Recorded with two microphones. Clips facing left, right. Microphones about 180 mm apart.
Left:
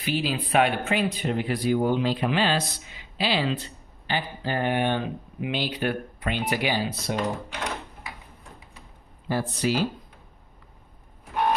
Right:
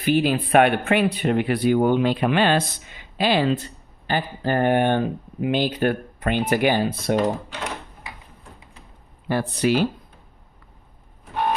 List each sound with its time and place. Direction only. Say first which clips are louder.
0.0 s speech: right 7 dB; 55° right (ahead or behind)
9.3 s speech: right 5 dB; 65° right (ahead or behind)